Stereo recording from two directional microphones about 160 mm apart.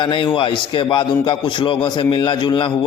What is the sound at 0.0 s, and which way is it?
A man's voice, 30° left (ahead or behind).